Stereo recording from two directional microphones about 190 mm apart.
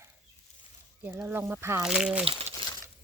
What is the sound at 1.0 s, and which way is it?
Speech, 10° right (ahead or behind).